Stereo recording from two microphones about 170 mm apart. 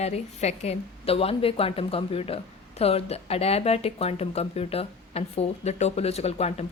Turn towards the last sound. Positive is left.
turn(degrees=40)  # may be behind; listen again after turning